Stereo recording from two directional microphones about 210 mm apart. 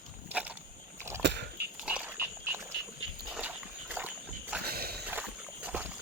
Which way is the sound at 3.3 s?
5° right (ahead or behind).